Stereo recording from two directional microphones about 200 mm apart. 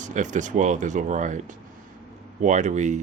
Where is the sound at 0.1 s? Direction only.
40° right (ahead or behind).